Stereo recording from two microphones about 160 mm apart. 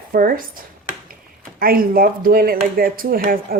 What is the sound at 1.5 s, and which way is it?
Speech, 65° right (ahead or behind).